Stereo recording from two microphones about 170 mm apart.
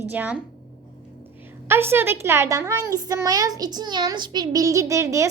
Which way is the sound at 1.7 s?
15° right (ahead or behind).